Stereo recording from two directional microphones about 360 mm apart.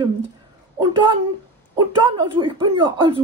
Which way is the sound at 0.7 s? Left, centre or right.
Centre.